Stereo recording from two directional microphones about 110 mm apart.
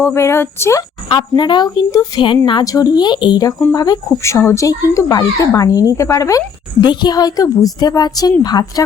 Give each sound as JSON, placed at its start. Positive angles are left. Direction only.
{"t": 0.0, "sound": "speech", "side_deg": 25}
{"t": 1.0, "sound": "a woman's voice", "side_deg": 45}
{"t": 2.6, "sound": "speech", "side_deg": 35}
{"t": 6.8, "sound": "speech", "side_deg": 40}